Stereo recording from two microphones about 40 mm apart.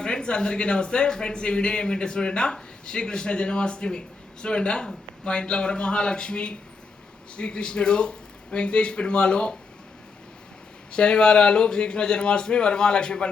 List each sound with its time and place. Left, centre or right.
0.0 s speech: left
10.9 s speech: left